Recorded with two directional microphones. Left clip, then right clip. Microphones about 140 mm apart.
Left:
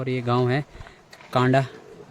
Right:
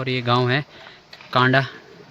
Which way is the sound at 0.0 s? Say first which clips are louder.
Right 3 dB; 5° left (ahead or behind).